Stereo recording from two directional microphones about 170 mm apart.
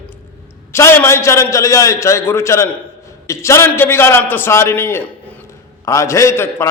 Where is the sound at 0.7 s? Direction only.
15° left (ahead or behind).